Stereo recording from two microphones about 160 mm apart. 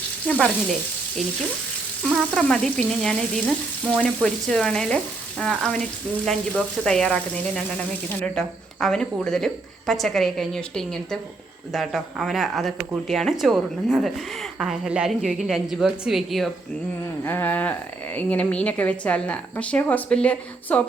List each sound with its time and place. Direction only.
2.0 s speech: centre (ahead or behind)
17.2 s speech: 10° left (ahead or behind)